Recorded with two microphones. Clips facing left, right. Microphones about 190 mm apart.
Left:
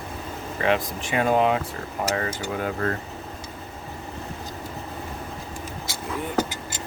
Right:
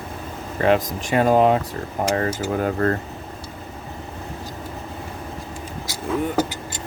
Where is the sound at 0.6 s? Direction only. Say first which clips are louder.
Right 5 dB; 40° right (ahead or behind).